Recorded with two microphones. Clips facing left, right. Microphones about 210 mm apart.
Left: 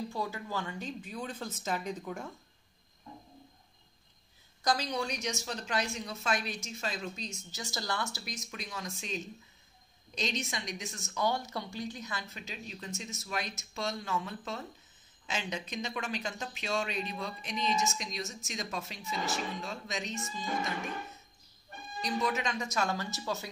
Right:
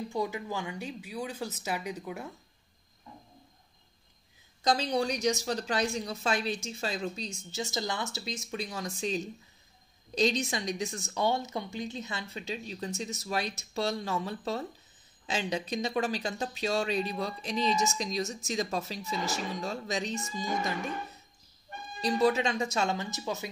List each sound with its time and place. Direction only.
0.1 s speech: 15° right (ahead or behind)
4.6 s speech: 30° right (ahead or behind)
22.0 s speech: 30° right (ahead or behind)